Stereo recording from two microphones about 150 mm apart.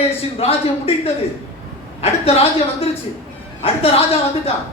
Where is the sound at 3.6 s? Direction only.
40° left (ahead or behind).